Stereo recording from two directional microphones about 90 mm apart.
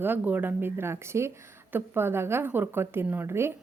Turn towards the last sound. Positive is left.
turn(degrees=-25)  # may be behind; listen again after turning